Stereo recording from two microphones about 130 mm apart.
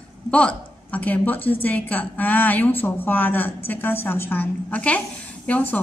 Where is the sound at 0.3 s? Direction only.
10° left (ahead or behind).